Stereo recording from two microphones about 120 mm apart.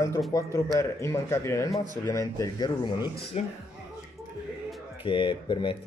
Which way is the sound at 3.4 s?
60° left (ahead or behind).